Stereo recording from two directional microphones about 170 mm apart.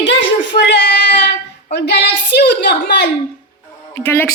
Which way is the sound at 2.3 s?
80° left.